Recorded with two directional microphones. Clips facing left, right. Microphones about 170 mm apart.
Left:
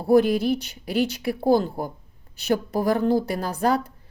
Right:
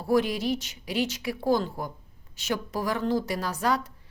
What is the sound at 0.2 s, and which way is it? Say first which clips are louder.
Speech: left 7 dB; 50° left (ahead or behind).